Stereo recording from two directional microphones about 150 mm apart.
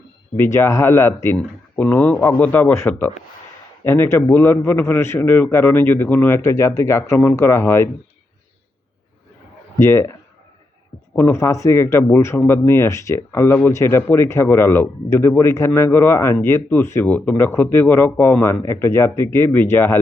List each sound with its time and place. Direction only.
0.3 s speech: 15° left (ahead or behind)
9.7 s speech: 15° left (ahead or behind)